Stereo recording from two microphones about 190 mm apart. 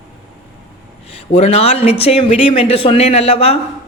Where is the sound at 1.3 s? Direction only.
35° left (ahead or behind).